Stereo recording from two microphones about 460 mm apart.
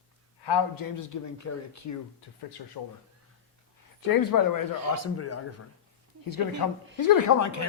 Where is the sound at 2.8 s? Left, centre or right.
Left.